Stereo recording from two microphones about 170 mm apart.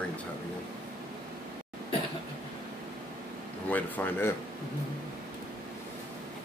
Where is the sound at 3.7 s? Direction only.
10° left (ahead or behind).